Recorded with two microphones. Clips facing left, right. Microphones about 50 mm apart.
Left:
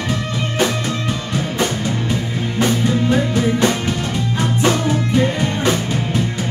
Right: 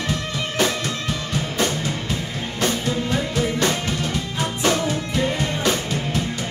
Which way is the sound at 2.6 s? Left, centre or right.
Centre.